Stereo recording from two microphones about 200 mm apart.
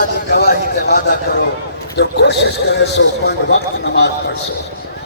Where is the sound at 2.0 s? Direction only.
60° left (ahead or behind).